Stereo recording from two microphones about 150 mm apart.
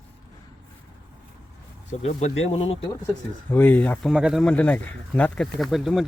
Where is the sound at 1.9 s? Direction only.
45° left (ahead or behind).